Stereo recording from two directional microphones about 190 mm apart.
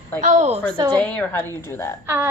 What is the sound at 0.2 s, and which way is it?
Speech, 40° right (ahead or behind).